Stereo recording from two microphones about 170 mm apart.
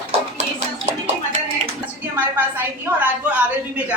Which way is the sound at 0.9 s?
40° right (ahead or behind).